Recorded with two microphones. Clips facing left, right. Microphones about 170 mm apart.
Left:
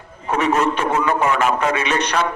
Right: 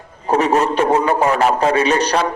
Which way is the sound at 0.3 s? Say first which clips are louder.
Right 3 dB; 35° right (ahead or behind).